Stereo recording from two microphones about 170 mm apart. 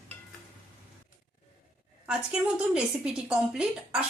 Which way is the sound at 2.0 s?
5° right (ahead or behind).